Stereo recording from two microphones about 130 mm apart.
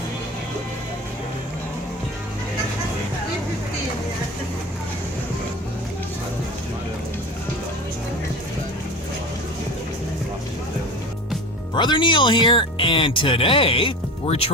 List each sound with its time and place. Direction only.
11.7 s speech: 35° left (ahead or behind)